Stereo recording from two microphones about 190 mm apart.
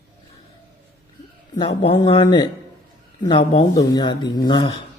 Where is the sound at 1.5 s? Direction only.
25° left (ahead or behind).